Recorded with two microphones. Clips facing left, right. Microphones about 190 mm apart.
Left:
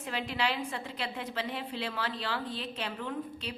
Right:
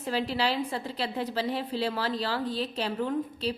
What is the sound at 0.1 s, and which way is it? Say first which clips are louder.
A woman's voice: right 5 dB; 35° right (ahead or behind).